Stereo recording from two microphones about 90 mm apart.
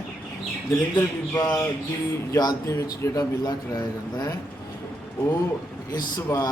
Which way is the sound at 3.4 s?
50° left (ahead or behind).